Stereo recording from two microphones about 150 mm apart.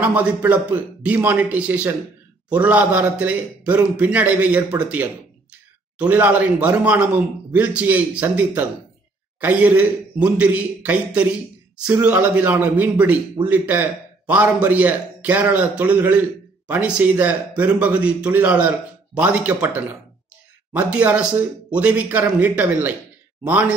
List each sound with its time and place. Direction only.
0.0 s a man's voice: 10° right (ahead or behind)